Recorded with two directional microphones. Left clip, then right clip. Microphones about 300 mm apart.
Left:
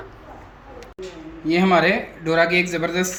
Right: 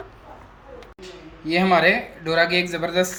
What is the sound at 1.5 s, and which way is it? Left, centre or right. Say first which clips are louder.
Speech: even; centre.